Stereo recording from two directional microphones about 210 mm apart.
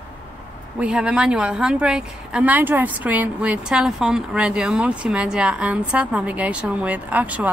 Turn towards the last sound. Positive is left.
turn(degrees=-5)  # may be behind; listen again after turning